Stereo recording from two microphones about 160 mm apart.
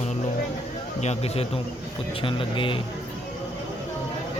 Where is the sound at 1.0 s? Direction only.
40° left (ahead or behind).